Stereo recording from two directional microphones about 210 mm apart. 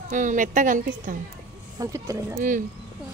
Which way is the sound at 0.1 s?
35° right (ahead or behind).